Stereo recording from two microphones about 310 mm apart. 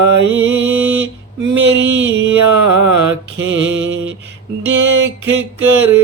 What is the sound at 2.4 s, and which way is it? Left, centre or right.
Mantra, right.